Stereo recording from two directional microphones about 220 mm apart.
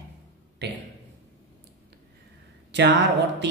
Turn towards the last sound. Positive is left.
turn(degrees=-50)  # may be behind; listen again after turning